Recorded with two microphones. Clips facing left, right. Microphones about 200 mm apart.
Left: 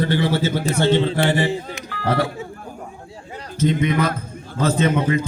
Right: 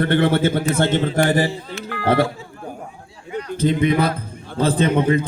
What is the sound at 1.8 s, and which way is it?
Music, 55° right (ahead or behind).